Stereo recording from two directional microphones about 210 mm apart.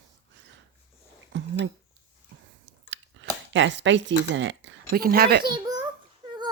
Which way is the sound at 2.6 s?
60° right (ahead or behind).